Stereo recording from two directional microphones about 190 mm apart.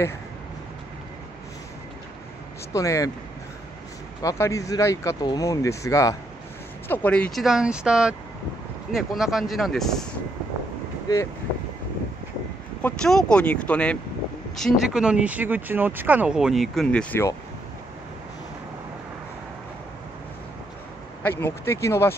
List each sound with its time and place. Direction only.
2.7 s speech: 15° left (ahead or behind)
4.2 s speech: 15° left (ahead or behind)
12.8 s speech: 5° left (ahead or behind)
21.2 s speech: 10° left (ahead or behind)